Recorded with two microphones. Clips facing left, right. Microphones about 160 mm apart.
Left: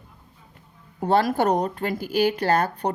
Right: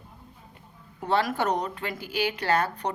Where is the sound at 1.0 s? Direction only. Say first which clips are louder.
Left 5 dB; 40° left (ahead or behind).